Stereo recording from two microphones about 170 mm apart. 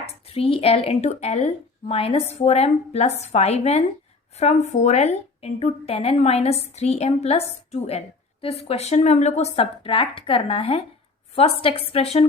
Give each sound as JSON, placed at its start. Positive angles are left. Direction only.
{"t": 0.0, "sound": "a woman's voice", "side_deg": 35}